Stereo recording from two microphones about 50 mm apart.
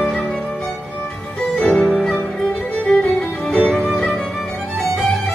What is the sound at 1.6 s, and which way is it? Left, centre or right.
Music, centre.